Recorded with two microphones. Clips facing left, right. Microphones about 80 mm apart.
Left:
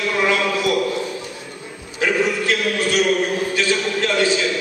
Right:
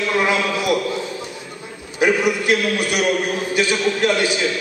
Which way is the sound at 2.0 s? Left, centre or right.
Centre.